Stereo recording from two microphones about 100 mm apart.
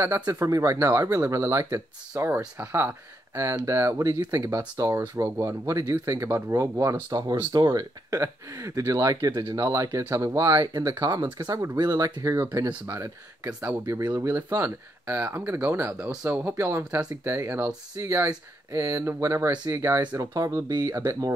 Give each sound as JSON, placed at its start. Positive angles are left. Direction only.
{"t": 0.3, "sound": "speech", "side_deg": -30}
{"t": 12.2, "sound": "speech", "side_deg": -30}
{"t": 13.6, "sound": "speech", "side_deg": -15}
{"t": 13.9, "sound": "speech", "side_deg": -30}